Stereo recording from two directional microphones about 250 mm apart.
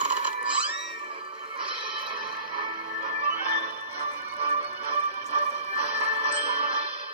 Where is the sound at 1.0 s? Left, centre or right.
Right.